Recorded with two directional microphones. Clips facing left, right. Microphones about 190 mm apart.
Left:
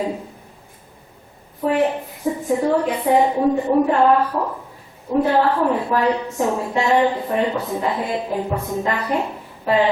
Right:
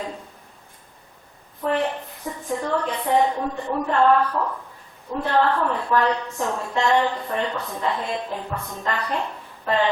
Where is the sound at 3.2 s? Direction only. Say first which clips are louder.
Left 5 dB; 20° left (ahead or behind).